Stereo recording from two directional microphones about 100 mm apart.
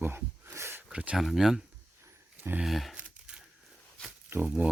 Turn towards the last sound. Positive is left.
turn(degrees=-30)  # may be behind; listen again after turning